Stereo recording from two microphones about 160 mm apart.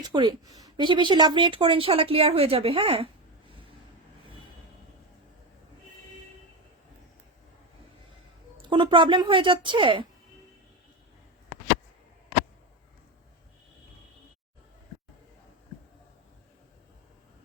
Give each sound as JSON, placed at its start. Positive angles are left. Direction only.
{"t": 0.0, "sound": "a woman's voice", "side_deg": -25}
{"t": 8.6, "sound": "a woman's voice", "side_deg": -30}